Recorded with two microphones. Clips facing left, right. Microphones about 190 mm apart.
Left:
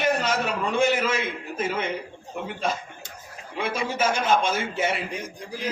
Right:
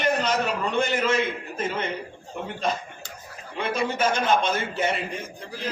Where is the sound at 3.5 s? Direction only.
10° left (ahead or behind).